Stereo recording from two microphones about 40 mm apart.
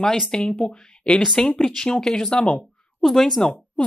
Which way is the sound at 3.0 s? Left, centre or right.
Centre.